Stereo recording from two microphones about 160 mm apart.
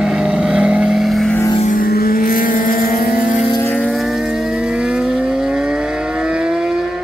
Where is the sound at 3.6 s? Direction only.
10° left (ahead or behind).